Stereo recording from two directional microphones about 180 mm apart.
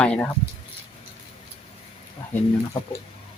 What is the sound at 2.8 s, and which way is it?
Speech, 25° left (ahead or behind).